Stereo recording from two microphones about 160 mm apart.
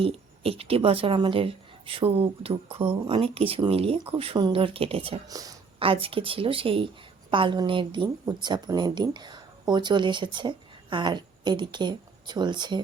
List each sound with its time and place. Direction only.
0.0 s a woman's voice: 35° right (ahead or behind)
5.3 s a woman's voice: 20° right (ahead or behind)
5.8 s a woman's voice: 35° right (ahead or behind)